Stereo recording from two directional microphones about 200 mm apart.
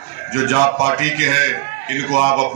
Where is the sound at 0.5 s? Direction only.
35° right (ahead or behind).